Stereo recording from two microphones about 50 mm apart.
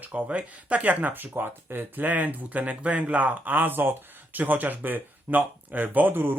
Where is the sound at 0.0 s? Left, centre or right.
Right.